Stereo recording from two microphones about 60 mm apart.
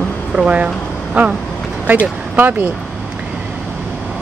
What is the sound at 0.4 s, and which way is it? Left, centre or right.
Speech, right.